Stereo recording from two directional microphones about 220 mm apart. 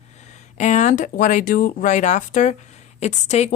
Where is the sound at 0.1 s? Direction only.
30° left (ahead or behind).